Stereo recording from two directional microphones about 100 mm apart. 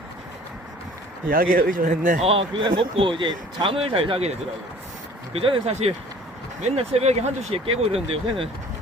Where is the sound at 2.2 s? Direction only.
65° right (ahead or behind).